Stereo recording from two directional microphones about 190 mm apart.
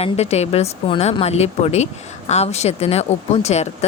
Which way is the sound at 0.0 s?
35° left (ahead or behind).